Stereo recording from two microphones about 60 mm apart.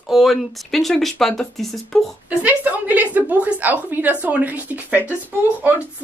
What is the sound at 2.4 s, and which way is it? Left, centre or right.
A woman's voice, right.